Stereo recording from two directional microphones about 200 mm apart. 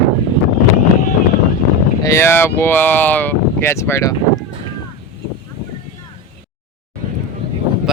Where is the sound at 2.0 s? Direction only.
15° left (ahead or behind).